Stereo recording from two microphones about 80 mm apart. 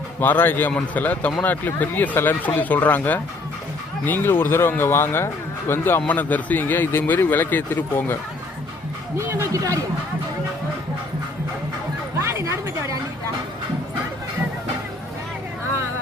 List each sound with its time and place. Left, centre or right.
0.2 s a man's voice: left
9.1 s a man's voice: right
12.2 s a sound: right